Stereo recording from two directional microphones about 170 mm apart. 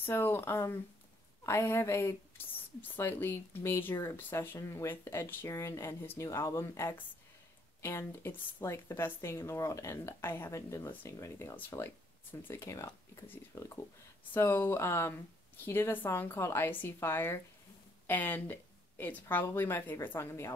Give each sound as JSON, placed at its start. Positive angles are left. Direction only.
{"t": 0.0, "sound": "speech", "side_deg": 15}